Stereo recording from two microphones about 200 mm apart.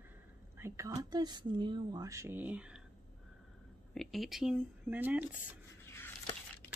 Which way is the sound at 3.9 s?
Centre (ahead or behind).